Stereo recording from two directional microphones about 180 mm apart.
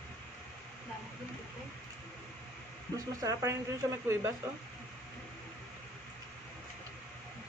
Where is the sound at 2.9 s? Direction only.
20° right (ahead or behind).